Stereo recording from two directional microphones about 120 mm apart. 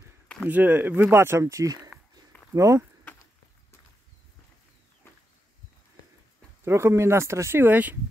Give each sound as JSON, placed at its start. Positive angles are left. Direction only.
{"t": 0.5, "sound": "speech", "side_deg": -15}
{"t": 6.6, "sound": "speech", "side_deg": -20}